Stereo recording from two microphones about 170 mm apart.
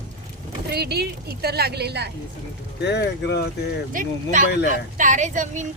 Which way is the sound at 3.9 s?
50° right (ahead or behind).